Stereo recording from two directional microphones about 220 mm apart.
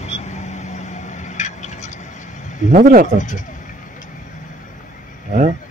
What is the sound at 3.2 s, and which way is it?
Speech, 35° left (ahead or behind).